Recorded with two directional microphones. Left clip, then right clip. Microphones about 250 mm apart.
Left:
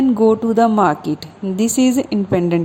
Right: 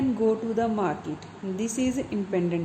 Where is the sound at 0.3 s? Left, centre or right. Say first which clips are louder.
Left 12 dB; left.